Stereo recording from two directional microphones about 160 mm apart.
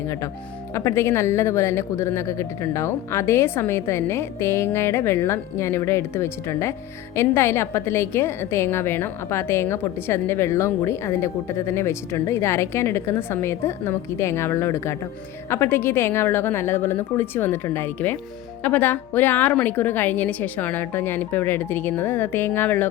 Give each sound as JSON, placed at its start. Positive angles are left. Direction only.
{"t": 0.7, "sound": "a woman's voice", "side_deg": 15}